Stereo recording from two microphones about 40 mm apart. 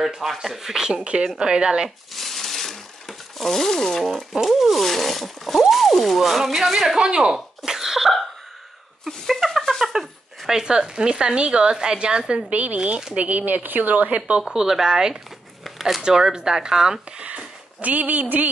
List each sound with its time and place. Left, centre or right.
0.0 s speech: centre
1.0 s speech: right
2.1 s a sound: centre
4.5 s speech: centre
7.0 s speech: right
7.3 s cough: centre
9.9 s a sound: centre
10.7 s speech: right
12.4 s speech: right
14.5 s speech: centre
15.6 s a sound: centre
16.0 s speech: centre
17.8 s speech: right